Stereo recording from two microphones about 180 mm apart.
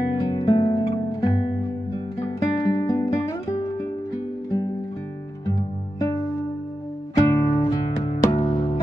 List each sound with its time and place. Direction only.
0.1 s music: 25° left (ahead or behind)
5.6 s music: 20° left (ahead or behind)